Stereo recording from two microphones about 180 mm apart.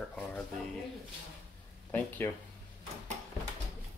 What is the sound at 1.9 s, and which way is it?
Speech, 10° left (ahead or behind).